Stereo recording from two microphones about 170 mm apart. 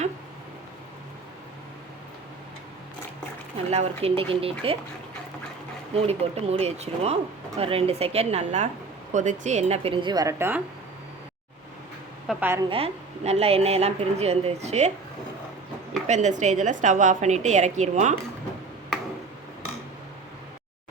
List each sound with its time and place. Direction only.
3.7 s a woman's voice: 35° right (ahead or behind)
5.9 s a woman's voice: 35° right (ahead or behind); by 10.6 s 15° right (ahead or behind)
12.3 s a woman's voice: 10° right (ahead or behind)
12.6 s a woman's voice: 35° right (ahead or behind)
16.0 s a woman's voice: 45° right (ahead or behind)